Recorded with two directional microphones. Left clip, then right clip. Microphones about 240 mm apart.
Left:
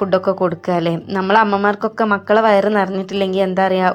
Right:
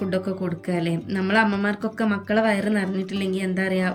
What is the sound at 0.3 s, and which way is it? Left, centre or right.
Speech, left.